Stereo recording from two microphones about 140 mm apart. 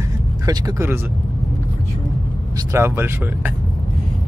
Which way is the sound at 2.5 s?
20° right (ahead or behind).